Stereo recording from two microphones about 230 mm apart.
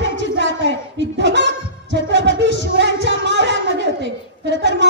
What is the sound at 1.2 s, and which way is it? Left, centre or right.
Music, right.